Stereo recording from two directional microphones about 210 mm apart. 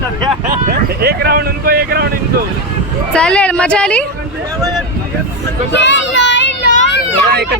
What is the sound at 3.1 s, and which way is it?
Speech, 5° left (ahead or behind).